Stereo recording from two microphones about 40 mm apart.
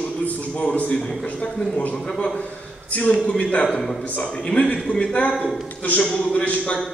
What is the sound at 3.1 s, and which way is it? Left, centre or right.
Speech, left.